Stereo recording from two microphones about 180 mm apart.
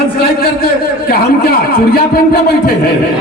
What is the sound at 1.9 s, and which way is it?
Speech, 55° left (ahead or behind).